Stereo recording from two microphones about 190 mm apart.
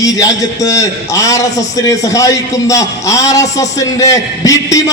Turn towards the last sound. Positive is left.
turn(degrees=15)  # may be behind; listen again after turning